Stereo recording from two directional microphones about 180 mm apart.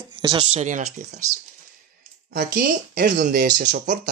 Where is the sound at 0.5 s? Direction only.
40° right (ahead or behind).